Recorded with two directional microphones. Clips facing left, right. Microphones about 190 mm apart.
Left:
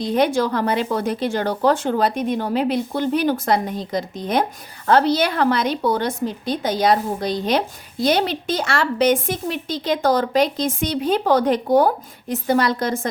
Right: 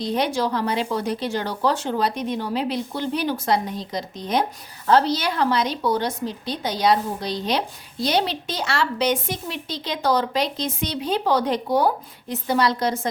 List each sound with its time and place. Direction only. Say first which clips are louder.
0.0 s speech: left 4 dB; 50° left (ahead or behind)